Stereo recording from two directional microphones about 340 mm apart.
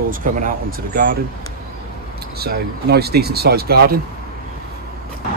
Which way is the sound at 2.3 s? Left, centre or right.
Right.